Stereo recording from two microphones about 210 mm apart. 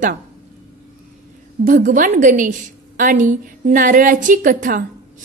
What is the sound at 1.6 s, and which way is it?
A woman's voice, 40° right (ahead or behind).